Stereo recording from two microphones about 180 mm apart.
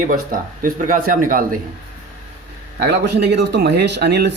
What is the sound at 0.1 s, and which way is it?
Speech, 50° right (ahead or behind).